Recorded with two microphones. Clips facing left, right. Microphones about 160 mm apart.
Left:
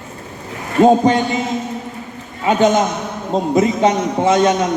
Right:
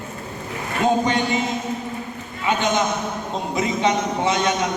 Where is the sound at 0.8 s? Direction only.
40° left (ahead or behind).